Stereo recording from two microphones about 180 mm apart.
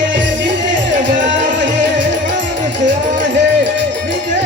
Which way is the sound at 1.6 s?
80° right.